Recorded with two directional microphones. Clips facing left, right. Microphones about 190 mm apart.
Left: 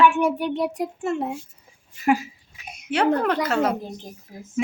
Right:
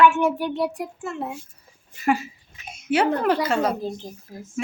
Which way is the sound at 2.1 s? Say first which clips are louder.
Left 2 dB; 10° left (ahead or behind).